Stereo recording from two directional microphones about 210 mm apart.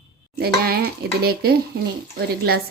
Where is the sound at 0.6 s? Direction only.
45° right (ahead or behind).